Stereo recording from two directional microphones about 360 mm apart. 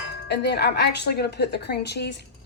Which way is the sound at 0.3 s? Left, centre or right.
Left.